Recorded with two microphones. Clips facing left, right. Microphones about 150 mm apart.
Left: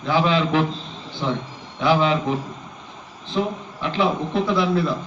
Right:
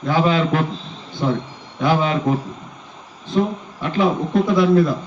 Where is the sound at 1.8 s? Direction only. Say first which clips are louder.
Right 1 dB; 45° right (ahead or behind).